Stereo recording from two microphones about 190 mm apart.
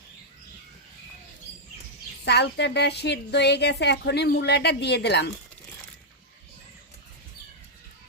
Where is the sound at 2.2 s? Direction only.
60° left (ahead or behind).